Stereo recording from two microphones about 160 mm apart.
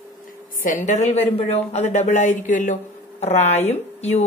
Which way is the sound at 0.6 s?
50° left (ahead or behind).